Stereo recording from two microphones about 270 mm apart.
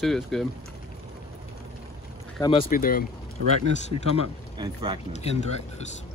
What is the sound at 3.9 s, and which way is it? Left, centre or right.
Speech, left.